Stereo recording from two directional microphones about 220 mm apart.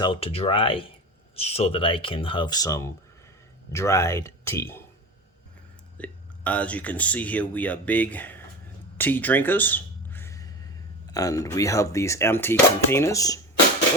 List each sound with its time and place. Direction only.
0.0 s speech: 25° left (ahead or behind)
6.0 s speech: 5° left (ahead or behind)
9.0 s a sound: 10° left (ahead or behind)
11.1 s speech: 15° left (ahead or behind)